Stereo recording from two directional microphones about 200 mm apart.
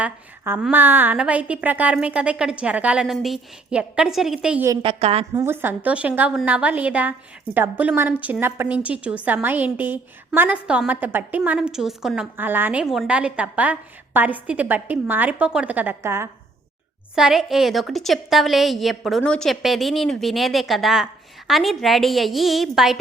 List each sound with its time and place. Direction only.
0.0 s a woman's voice: 10° right (ahead or behind)
4.8 s a woman's voice: 30° right (ahead or behind)
5.3 s a woman's voice: 10° right (ahead or behind)
17.2 s a woman's voice: centre (ahead or behind)